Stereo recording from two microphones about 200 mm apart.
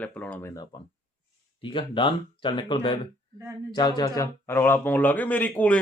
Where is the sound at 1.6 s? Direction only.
25° left (ahead or behind).